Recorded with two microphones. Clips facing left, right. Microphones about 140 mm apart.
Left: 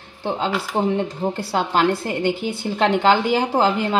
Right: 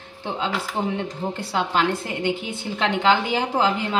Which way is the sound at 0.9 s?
35° left (ahead or behind).